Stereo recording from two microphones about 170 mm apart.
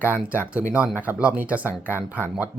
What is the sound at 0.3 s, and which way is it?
A man's voice, 10° right (ahead or behind).